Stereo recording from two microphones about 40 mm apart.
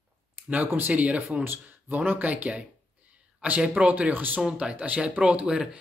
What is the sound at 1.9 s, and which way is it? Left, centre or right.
Speech, right.